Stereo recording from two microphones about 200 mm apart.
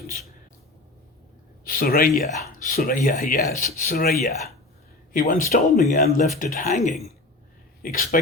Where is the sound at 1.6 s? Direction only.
45° left (ahead or behind).